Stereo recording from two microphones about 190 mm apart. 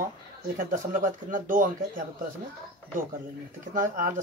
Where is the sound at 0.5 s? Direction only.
45° right (ahead or behind).